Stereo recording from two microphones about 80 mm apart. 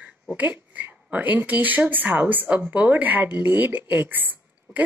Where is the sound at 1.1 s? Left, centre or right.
Right.